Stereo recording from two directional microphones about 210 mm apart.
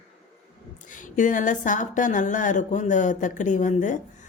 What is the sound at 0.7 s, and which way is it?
A woman's voice, 35° left (ahead or behind).